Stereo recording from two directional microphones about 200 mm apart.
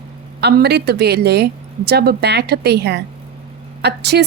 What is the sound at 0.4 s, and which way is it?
A woman's voice, 55° right (ahead or behind).